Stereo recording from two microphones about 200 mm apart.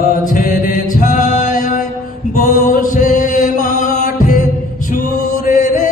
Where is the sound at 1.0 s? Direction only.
40° left (ahead or behind).